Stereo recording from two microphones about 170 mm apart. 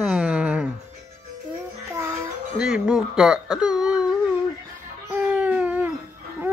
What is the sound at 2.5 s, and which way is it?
Speech, 5° right (ahead or behind).